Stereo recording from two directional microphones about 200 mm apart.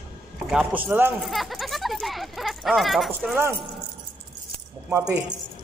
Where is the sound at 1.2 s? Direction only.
Centre (ahead or behind).